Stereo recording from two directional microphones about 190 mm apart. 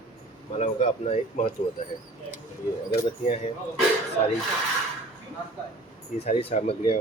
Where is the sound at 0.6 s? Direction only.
35° left (ahead or behind).